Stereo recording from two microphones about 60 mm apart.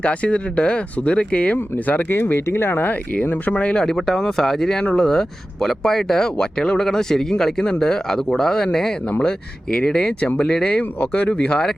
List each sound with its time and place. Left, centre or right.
0.0 s speech: left
3.2 s speech: left
3.8 s speech: centre